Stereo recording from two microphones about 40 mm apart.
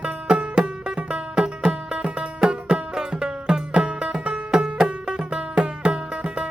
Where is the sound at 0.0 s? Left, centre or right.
Right.